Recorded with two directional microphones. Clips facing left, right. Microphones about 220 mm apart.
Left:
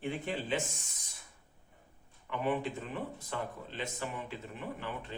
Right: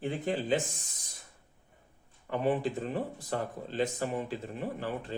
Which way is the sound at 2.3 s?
40° right (ahead or behind).